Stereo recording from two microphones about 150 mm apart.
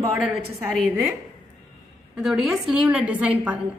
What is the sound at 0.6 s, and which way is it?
Speech, 5° right (ahead or behind).